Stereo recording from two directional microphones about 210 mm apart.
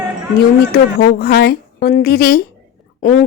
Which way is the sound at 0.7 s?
50° left (ahead or behind).